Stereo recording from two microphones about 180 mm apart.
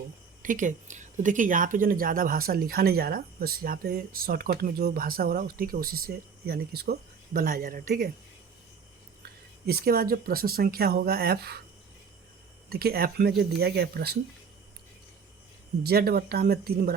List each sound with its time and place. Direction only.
0.4 s speech: 45° right (ahead or behind)
9.6 s speech: 55° right (ahead or behind)
12.6 s speech: 60° right (ahead or behind)
15.8 s speech: 60° right (ahead or behind)